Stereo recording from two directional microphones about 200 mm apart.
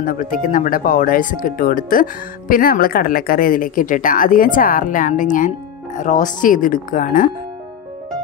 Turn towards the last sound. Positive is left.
turn(degrees=40)  # may be behind; listen again after turning